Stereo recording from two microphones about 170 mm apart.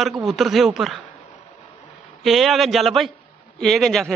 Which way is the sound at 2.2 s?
Centre (ahead or behind).